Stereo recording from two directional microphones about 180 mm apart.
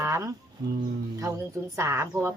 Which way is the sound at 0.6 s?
20° right (ahead or behind).